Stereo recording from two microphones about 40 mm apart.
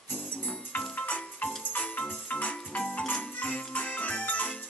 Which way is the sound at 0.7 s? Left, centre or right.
Left.